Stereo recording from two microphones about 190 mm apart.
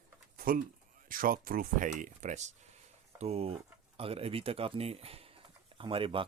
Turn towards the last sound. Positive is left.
turn(degrees=-30)  # may be behind; listen again after turning